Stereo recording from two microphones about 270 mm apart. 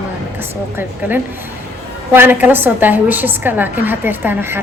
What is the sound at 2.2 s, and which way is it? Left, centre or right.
A woman's voice, centre.